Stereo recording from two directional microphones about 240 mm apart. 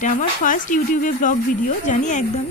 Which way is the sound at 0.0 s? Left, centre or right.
Left.